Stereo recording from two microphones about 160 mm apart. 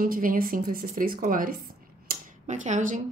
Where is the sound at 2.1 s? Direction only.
50° right (ahead or behind).